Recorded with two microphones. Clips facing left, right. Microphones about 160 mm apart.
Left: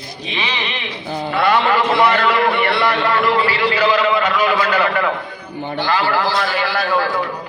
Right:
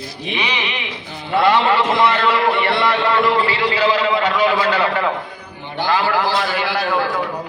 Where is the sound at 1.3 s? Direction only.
25° right (ahead or behind).